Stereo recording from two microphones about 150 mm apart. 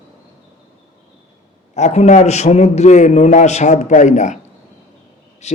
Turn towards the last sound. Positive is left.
turn(degrees=45)  # may be behind; listen again after turning